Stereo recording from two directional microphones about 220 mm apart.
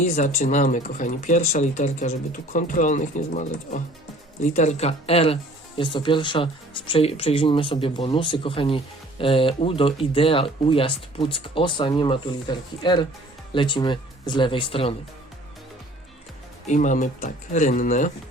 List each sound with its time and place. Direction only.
0.0 s speech: 35° left (ahead or behind)
16.6 s speech: 35° left (ahead or behind)